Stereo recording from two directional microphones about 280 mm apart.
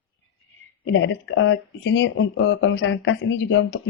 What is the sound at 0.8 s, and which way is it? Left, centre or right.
Speech, left.